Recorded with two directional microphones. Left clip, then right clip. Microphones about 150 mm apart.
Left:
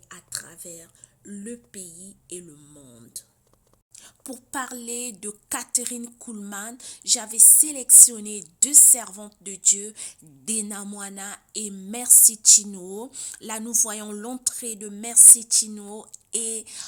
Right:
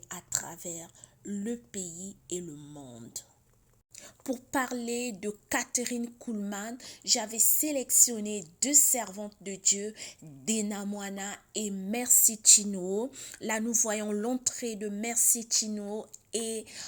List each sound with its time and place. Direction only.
0.1 s a woman's voice: 40° right (ahead or behind)
3.9 s a sound: 20° right (ahead or behind)
4.8 s a woman's voice: 10° right (ahead or behind)
10.4 s a woman's voice: 45° left (ahead or behind)
10.7 s a woman's voice: 5° right (ahead or behind)
11.9 s speech: 15° right (ahead or behind)
13.1 s a woman's voice: 5° right (ahead or behind)
13.3 s a woman's voice: 15° right (ahead or behind)